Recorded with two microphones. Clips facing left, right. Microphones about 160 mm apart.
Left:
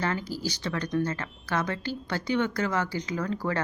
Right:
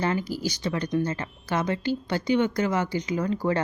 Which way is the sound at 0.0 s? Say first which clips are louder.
Right 3 dB; 15° right (ahead or behind).